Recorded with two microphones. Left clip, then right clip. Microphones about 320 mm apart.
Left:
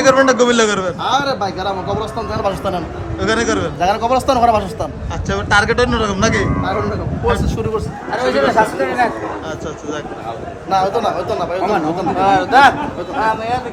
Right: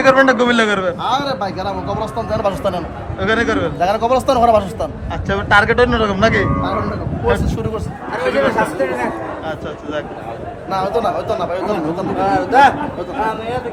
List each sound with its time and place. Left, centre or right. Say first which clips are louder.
0.0 s a man's voice: even; centre
8.5 s speech: left 3 dB; left
10.7 s a man's voice: left 2 dB; centre